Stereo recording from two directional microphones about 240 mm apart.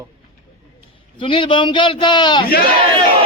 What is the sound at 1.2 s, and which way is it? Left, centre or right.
A man's voice, centre.